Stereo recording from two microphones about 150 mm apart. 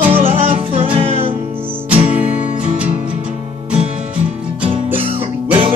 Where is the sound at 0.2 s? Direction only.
40° right (ahead or behind).